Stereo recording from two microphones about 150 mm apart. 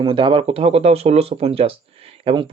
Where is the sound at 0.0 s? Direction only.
35° right (ahead or behind).